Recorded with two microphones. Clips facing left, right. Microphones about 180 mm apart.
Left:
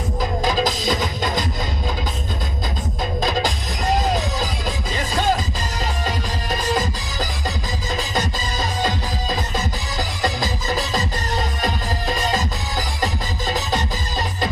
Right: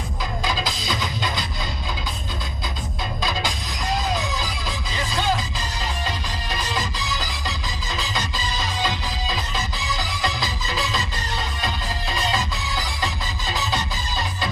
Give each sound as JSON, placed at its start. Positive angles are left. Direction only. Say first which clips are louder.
{"t": 0.2, "sound": "music", "louder": "left 7 dB", "side_deg": 45}
{"t": 3.2, "sound": "music", "louder": "left 5 dB", "side_deg": 45}
{"t": 4.9, "sound": "music", "louder": "left 3 dB", "side_deg": 45}